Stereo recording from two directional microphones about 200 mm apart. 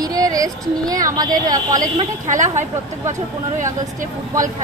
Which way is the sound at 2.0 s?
40° right (ahead or behind).